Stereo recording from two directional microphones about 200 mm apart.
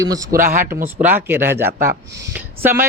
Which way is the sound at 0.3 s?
45° right (ahead or behind).